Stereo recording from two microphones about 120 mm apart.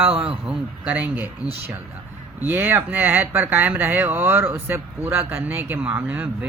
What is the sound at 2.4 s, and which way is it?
A man's voice, 20° right (ahead or behind).